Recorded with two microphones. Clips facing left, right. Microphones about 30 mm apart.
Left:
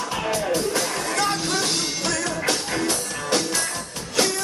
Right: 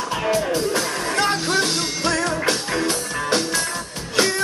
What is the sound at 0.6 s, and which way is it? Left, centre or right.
Music, right.